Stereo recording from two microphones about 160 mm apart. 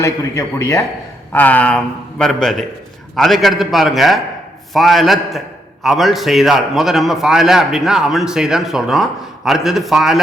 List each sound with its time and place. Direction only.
0.0 s a man's voice: 20° left (ahead or behind); by 10.2 s centre (ahead or behind)